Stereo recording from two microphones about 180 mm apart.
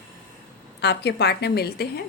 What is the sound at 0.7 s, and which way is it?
A woman's voice, 70° left (ahead or behind).